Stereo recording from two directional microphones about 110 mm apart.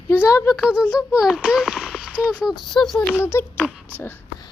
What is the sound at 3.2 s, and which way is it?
Speech, 20° left (ahead or behind).